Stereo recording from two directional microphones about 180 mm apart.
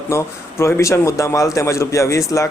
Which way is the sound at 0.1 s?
15° left (ahead or behind).